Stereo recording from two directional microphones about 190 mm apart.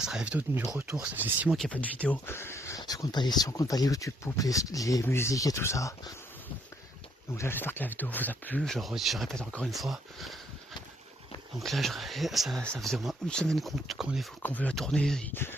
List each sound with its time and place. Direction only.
0.0 s speech: 5° right (ahead or behind); by 6.1 s 15° left (ahead or behind)
7.3 s speech: 10° left (ahead or behind)
11.6 s speech: centre (ahead or behind)